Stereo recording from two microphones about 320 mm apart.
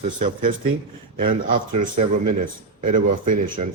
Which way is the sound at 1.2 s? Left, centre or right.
Right.